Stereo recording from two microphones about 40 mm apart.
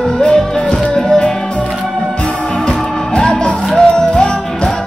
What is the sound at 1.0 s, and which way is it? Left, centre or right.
Music, centre.